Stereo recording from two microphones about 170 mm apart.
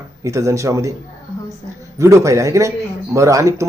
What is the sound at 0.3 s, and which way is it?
Speech, 20° right (ahead or behind).